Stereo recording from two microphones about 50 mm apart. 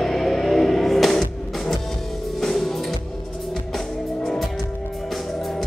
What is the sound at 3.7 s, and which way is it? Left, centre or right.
Music, centre.